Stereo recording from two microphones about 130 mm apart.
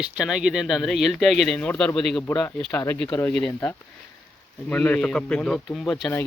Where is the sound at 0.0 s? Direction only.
5° right (ahead or behind).